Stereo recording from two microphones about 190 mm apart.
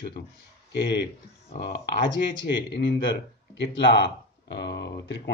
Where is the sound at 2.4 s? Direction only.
65° left (ahead or behind).